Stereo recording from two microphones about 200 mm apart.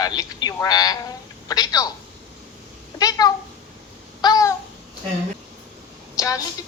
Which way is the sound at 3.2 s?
20° left (ahead or behind).